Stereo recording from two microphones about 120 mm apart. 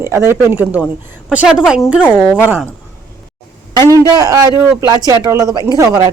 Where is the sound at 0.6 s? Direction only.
10° right (ahead or behind).